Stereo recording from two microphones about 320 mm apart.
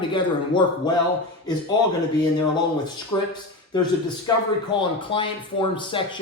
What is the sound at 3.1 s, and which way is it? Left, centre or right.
Speech, centre.